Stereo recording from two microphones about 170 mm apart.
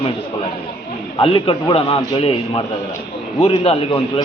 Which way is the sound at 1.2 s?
30° left (ahead or behind).